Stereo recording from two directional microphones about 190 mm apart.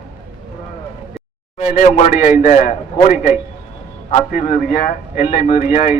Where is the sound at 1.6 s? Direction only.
40° left (ahead or behind).